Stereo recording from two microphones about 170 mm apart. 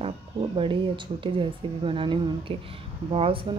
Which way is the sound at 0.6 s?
30° right (ahead or behind).